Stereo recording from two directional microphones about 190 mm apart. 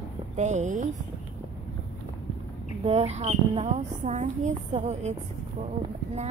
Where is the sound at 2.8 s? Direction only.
35° right (ahead or behind).